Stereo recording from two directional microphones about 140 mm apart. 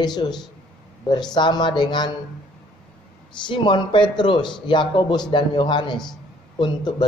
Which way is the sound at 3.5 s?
35° left (ahead or behind).